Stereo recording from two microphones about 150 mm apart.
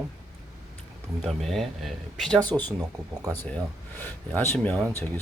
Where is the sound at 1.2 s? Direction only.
Centre (ahead or behind).